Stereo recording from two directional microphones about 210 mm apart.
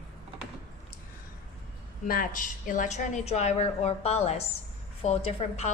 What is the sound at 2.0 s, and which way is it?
A woman's voice, 40° left (ahead or behind).